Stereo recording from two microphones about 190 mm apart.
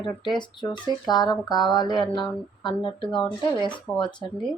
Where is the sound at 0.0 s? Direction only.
25° left (ahead or behind).